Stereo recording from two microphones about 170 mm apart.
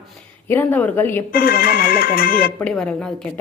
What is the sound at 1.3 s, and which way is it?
Speech, 60° left (ahead or behind).